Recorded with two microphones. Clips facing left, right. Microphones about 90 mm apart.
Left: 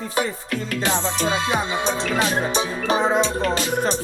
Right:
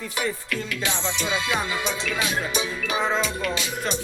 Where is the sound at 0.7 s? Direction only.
45° left (ahead or behind).